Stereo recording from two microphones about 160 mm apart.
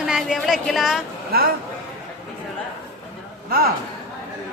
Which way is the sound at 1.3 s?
70° right (ahead or behind).